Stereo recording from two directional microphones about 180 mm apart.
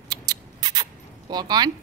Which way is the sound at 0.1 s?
20° right (ahead or behind).